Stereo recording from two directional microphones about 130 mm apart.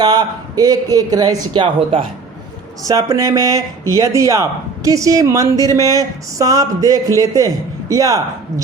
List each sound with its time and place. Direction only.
0.0 s a man's voice: 30° right (ahead or behind)
2.8 s speech: 25° right (ahead or behind)